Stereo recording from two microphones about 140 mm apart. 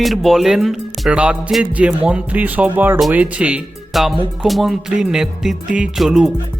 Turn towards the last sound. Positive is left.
turn(degrees=0)  # may be behind; listen again after turning